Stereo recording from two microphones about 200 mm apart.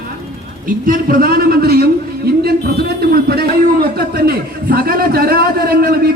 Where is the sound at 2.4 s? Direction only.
50° right (ahead or behind).